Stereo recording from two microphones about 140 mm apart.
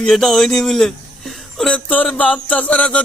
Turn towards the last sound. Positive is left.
turn(degrees=10)  # may be behind; listen again after turning